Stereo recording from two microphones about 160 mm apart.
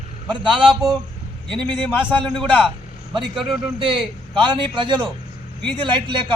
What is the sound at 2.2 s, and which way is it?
A man's voice, 5° left (ahead or behind).